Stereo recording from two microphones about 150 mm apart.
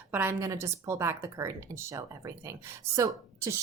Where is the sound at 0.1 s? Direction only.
15° right (ahead or behind).